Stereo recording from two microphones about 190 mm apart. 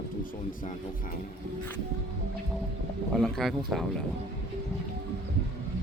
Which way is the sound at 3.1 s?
Centre (ahead or behind).